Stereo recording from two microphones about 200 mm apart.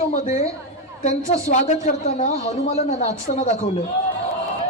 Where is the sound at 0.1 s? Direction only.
35° left (ahead or behind).